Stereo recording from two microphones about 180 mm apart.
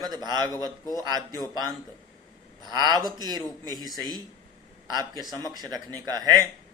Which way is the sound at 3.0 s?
20° right (ahead or behind).